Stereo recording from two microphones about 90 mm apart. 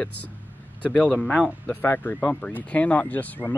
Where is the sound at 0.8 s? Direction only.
15° left (ahead or behind).